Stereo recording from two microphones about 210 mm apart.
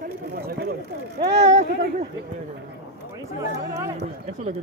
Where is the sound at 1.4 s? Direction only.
30° right (ahead or behind).